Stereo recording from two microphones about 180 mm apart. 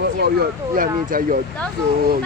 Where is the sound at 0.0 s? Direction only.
60° right (ahead or behind).